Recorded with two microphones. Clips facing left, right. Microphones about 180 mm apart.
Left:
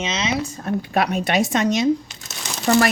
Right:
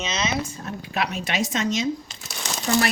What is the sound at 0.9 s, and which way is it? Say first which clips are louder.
A woman's voice: left 6 dB; 50° left (ahead or behind).